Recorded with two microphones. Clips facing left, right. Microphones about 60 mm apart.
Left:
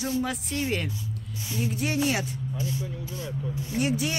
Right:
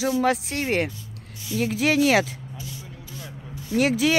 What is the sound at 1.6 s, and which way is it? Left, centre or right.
Speech, right.